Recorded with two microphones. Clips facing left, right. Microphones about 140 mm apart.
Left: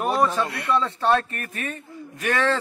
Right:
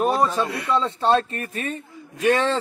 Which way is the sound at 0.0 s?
25° right (ahead or behind).